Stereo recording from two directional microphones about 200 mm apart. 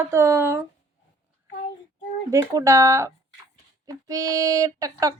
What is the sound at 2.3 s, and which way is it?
A woman's voice, 15° right (ahead or behind).